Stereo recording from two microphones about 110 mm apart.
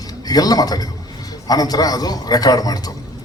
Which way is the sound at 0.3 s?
35° left (ahead or behind).